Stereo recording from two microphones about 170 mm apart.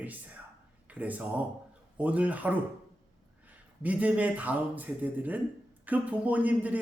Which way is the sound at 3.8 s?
10° right (ahead or behind).